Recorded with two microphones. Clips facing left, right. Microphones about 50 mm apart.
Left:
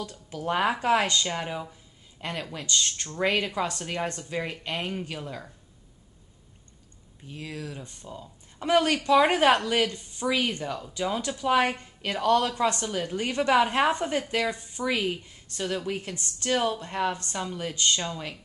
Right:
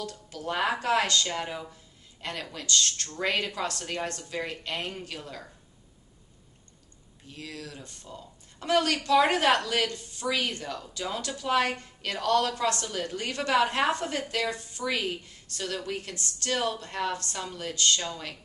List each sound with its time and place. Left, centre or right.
0.0 s speech: centre
7.2 s speech: centre